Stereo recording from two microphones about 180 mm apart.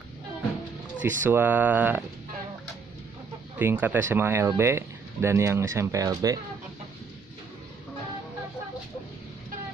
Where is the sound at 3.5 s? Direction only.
10° right (ahead or behind).